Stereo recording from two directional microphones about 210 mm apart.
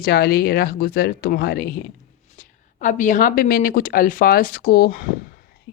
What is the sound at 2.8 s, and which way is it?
Speech, 35° left (ahead or behind).